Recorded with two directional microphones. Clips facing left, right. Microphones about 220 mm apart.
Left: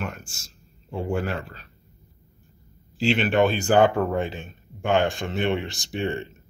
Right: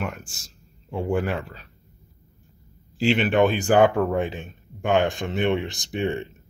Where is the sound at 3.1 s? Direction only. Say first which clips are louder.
Right 1 dB; 15° right (ahead or behind).